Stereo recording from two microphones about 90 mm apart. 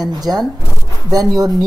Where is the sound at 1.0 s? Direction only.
40° right (ahead or behind).